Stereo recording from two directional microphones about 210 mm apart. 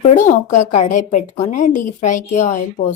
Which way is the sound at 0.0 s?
35° left (ahead or behind).